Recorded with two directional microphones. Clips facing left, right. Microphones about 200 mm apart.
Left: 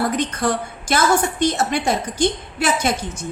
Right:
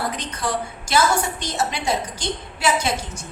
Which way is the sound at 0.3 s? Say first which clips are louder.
Left 4 dB; 50° left (ahead or behind).